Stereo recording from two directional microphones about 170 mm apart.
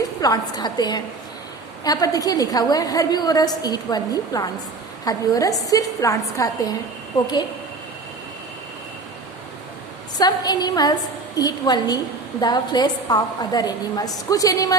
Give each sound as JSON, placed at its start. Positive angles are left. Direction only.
{"t": 0.2, "sound": "a woman's voice", "side_deg": 25}
{"t": 10.2, "sound": "a woman's voice", "side_deg": 25}